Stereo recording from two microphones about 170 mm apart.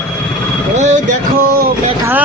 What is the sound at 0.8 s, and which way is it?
Music, 45° right (ahead or behind).